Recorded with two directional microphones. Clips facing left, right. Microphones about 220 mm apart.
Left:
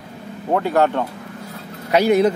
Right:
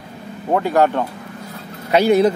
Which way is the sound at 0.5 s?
10° right (ahead or behind).